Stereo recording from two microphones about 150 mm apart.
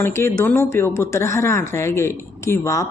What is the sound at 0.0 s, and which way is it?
A woman's voice, 15° left (ahead or behind).